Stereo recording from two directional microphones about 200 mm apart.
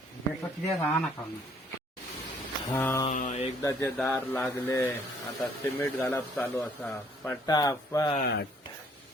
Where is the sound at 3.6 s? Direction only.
15° left (ahead or behind).